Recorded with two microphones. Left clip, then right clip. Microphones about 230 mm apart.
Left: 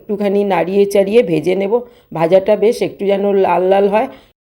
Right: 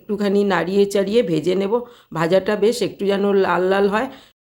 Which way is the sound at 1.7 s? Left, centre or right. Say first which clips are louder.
Left 5 dB; centre.